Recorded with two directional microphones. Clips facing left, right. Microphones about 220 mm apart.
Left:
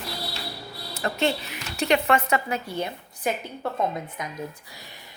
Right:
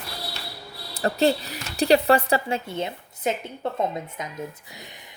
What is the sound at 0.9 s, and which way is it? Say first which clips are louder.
Speech: right 4 dB; 35° right (ahead or behind).